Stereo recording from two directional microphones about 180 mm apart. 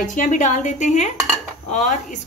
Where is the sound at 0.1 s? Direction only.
45° left (ahead or behind).